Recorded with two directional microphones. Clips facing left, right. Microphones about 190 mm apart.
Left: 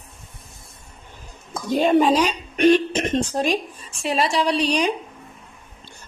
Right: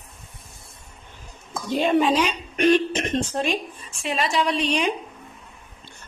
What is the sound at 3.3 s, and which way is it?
A woman's voice, 35° left (ahead or behind).